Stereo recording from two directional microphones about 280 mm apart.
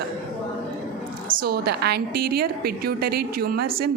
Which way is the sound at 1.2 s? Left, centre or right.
Right.